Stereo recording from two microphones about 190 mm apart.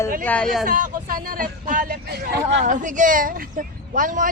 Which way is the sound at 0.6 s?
45° right (ahead or behind).